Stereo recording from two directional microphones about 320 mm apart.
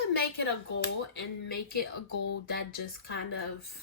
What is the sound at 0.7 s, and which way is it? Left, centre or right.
Speech, left.